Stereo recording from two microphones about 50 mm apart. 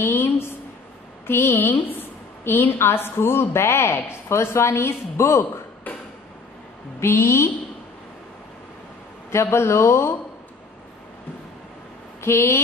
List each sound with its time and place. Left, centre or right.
0.0 s a sound: left
1.2 s a woman's voice: left
5.3 s a sound: left
7.0 s speech: left
9.3 s speech: left
12.2 s speech: left